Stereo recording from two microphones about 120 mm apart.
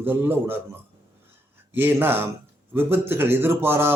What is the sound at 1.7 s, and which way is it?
A man's voice, 15° right (ahead or behind).